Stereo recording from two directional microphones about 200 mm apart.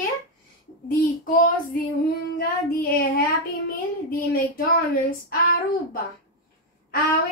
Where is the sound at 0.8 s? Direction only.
45° left (ahead or behind).